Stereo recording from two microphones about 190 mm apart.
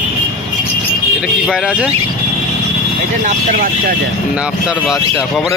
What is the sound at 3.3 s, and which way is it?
Speech, 45° right (ahead or behind).